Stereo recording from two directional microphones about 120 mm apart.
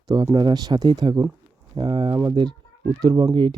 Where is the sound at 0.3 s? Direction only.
35° right (ahead or behind).